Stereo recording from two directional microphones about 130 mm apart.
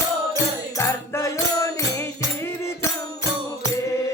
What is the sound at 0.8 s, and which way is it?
Music, 20° left (ahead or behind).